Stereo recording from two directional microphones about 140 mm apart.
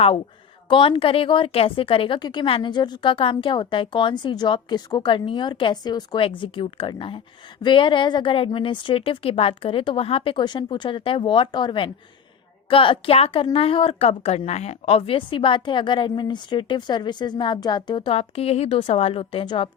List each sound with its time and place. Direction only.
0.7 s a woman's voice: 40° left (ahead or behind)